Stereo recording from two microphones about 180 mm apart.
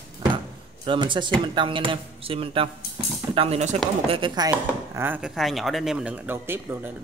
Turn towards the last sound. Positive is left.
turn(degrees=-10)  # may be behind; listen again after turning